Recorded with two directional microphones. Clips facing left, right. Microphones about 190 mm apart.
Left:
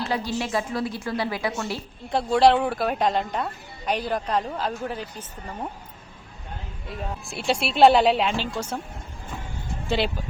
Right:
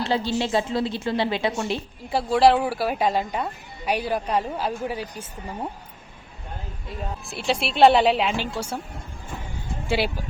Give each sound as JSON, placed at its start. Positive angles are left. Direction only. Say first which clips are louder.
{"t": 0.0, "sound": "a woman's voice", "louder": "right 3 dB", "side_deg": -30}
{"t": 2.0, "sound": "speech", "louder": "even", "side_deg": 0}
{"t": 7.0, "sound": "a woman's voice", "louder": "even", "side_deg": 0}